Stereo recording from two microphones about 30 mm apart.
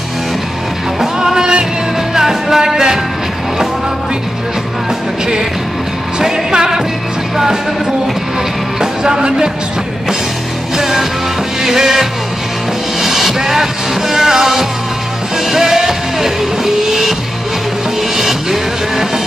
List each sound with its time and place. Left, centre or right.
0.9 s music: centre
6.2 s music: right
9.0 s music: right
10.8 s music: centre
18.1 s music: centre